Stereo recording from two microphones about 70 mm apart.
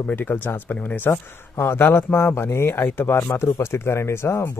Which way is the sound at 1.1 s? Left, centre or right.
Left.